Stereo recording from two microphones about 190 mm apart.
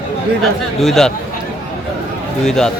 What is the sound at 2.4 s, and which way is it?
Speech, 5° left (ahead or behind).